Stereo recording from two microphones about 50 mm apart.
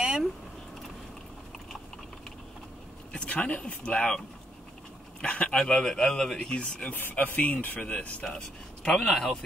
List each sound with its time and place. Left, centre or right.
3.1 s speech: left
5.2 s speech: left
5.6 s speech: centre
6.9 s speech: left
8.2 s speech: centre